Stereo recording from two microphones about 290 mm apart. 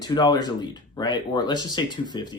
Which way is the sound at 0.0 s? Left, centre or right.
Centre.